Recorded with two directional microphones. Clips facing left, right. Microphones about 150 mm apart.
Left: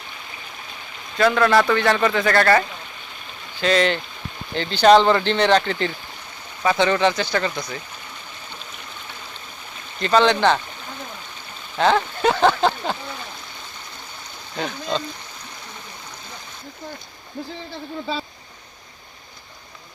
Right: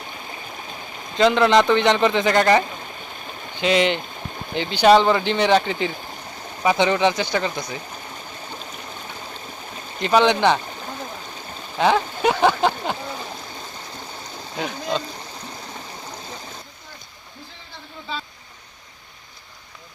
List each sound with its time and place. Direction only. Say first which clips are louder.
1.1 s speech: right 1 dB; 20° right (ahead or behind)
10.0 s speech: even; 15° right (ahead or behind)
11.8 s a sound: even; 10° right (ahead or behind)
14.6 s speech: even; 10° right (ahead or behind)